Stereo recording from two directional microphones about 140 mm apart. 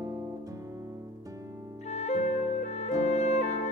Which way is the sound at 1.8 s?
50° left (ahead or behind).